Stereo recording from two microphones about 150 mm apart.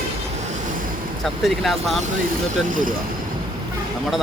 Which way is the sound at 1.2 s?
Centre (ahead or behind).